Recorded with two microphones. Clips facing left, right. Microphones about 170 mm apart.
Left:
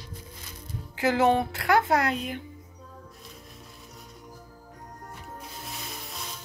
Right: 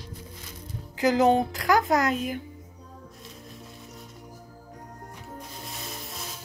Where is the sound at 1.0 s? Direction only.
40° right (ahead or behind).